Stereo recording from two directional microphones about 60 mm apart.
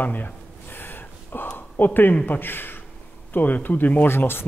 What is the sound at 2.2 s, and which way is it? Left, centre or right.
Speech, left.